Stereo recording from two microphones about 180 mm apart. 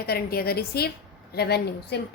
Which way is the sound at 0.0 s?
60° left (ahead or behind).